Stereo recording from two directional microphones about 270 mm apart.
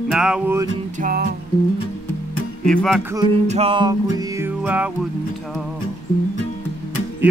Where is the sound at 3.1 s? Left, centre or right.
Centre.